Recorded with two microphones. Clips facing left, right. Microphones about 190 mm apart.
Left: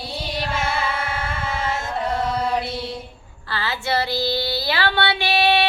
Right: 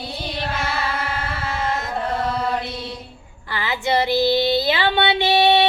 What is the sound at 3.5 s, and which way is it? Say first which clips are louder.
Female singing: right 3 dB; 15° right (ahead or behind).